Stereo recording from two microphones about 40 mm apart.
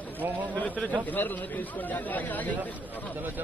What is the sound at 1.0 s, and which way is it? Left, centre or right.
Speech, left.